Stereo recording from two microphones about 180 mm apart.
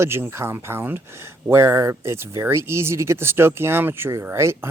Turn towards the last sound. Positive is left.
turn(degrees=-15)  # may be behind; listen again after turning